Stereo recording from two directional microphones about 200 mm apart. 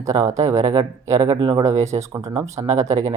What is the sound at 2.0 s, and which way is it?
Speech, 15° right (ahead or behind).